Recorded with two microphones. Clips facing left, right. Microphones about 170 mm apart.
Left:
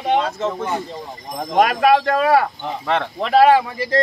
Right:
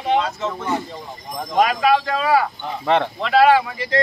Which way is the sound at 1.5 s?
60° left (ahead or behind).